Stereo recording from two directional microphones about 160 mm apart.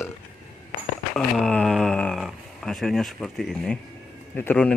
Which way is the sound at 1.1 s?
5° left (ahead or behind).